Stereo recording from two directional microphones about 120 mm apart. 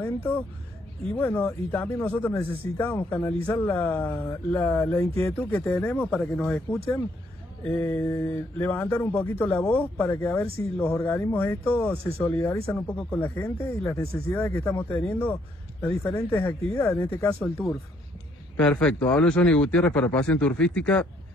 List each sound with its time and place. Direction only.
0.0 s speech: 20° left (ahead or behind)
8.0 s mantra: 20° left (ahead or behind)
9.4 s speech: 15° left (ahead or behind)
12.2 s mantra: 20° left (ahead or behind)
12.8 s speech: 10° left (ahead or behind)
15.8 s mantra: 20° left (ahead or behind)
17.1 s speech: 15° left (ahead or behind)